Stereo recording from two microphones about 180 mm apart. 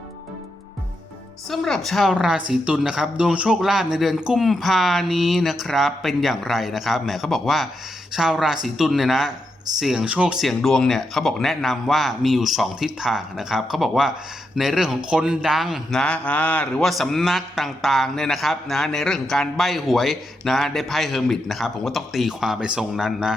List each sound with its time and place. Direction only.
1.5 s speech: centre (ahead or behind)